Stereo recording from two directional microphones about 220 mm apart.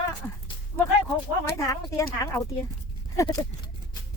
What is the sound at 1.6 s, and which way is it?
Speech, 15° left (ahead or behind).